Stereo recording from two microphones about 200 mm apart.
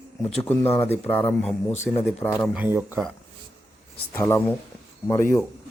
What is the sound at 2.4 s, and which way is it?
Speech, 5° right (ahead or behind).